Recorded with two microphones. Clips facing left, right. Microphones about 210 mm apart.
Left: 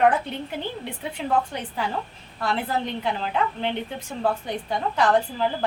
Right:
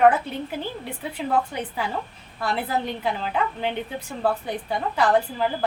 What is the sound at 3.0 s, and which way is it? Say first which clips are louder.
A woman's voice: even; 5° right (ahead or behind).